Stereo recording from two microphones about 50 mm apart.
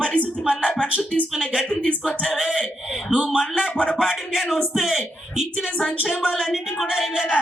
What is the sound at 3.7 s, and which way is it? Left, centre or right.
Speech, left.